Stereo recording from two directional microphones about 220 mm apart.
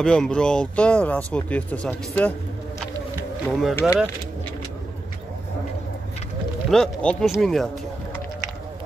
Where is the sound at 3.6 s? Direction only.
Centre (ahead or behind).